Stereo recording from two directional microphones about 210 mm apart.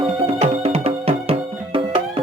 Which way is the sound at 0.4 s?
30° right (ahead or behind).